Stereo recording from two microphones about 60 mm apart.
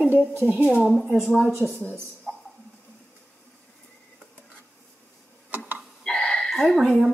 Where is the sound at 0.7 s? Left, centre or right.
Centre.